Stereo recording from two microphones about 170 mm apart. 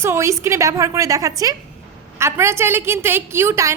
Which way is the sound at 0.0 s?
15° right (ahead or behind).